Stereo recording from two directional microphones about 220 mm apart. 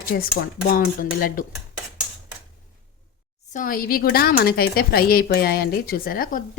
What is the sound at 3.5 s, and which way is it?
Speech, 40° left (ahead or behind).